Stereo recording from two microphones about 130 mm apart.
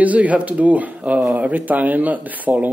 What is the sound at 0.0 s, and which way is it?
Speech, 10° right (ahead or behind).